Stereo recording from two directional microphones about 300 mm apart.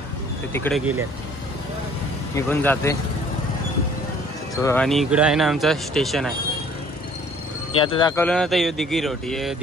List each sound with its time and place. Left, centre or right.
0.5 s speech: centre
2.3 s speech: centre
4.6 s speech: centre
7.8 s speech: centre
8.3 s speech: centre